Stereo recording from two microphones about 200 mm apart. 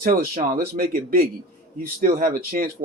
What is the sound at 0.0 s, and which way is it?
Speech, 45° right (ahead or behind).